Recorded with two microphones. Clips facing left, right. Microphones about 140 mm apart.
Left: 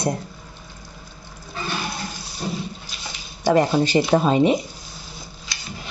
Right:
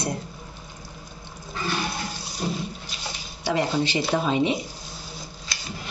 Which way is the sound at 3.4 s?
45° left (ahead or behind).